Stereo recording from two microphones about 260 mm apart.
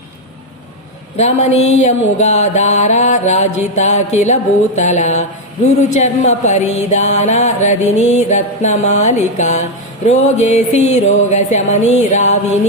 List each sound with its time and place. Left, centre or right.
1.1 s mantra: left